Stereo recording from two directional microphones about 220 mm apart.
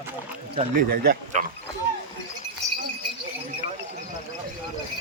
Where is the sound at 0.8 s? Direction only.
45° right (ahead or behind).